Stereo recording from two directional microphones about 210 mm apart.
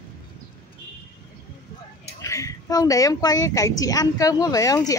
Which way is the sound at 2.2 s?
15° left (ahead or behind).